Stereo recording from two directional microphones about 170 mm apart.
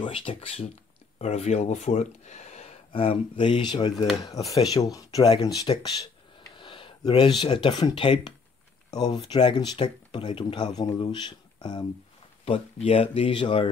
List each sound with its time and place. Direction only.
0.0 s speech: 30° left (ahead or behind)